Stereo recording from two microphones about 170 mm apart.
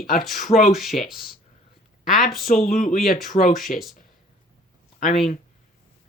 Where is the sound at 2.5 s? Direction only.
50° left (ahead or behind).